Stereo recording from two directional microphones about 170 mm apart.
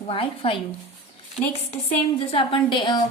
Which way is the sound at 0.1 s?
30° left (ahead or behind).